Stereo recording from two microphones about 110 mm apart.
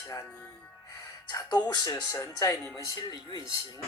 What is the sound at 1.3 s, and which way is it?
Speech, 35° left (ahead or behind).